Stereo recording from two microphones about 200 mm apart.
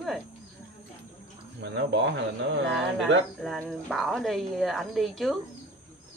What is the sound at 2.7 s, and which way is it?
Speech, centre (ahead or behind).